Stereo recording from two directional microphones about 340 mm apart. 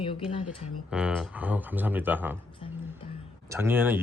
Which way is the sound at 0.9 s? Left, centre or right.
Centre.